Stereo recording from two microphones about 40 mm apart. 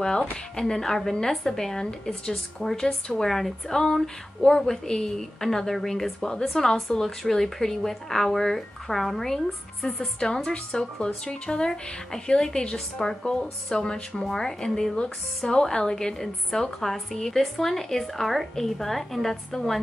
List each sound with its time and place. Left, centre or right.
0.6 s speech: centre
9.8 s a woman's voice: centre